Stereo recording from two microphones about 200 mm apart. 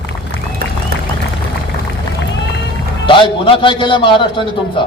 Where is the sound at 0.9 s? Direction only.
50° right (ahead or behind).